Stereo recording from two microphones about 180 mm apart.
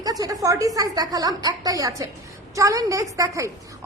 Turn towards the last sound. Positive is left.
turn(degrees=-20)  # may be behind; listen again after turning